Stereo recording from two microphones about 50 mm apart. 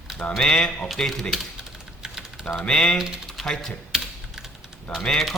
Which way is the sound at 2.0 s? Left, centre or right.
Centre.